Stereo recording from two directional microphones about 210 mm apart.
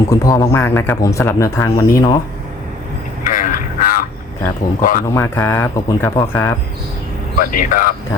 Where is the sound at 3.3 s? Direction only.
40° left (ahead or behind).